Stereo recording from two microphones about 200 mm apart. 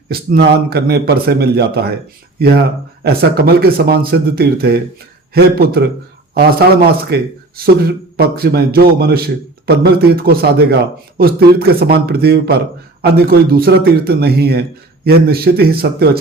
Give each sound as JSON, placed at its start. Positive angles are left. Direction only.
{"t": 0.1, "sound": "speech", "side_deg": -50}
{"t": 7.1, "sound": "speech", "side_deg": -50}